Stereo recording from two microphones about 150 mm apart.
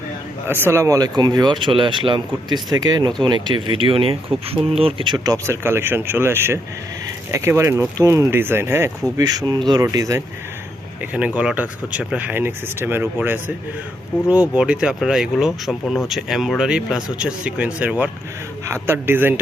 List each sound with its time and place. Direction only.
0.4 s speech: 15° right (ahead or behind)
11.0 s speech: 10° right (ahead or behind)
14.3 s speech: 10° right (ahead or behind)